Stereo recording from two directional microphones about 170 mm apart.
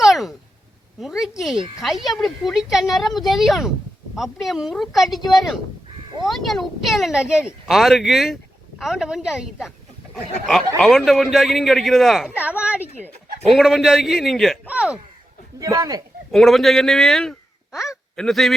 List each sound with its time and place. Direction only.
0.0 s a sound: centre (ahead or behind)
1.4 s speech: centre (ahead or behind)
6.2 s speech: centre (ahead or behind)
10.8 s speech: centre (ahead or behind)
15.5 s speech: 20° right (ahead or behind)
16.3 s speech: centre (ahead or behind)